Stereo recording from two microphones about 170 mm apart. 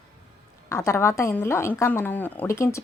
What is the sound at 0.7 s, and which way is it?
A woman's voice, 15° left (ahead or behind).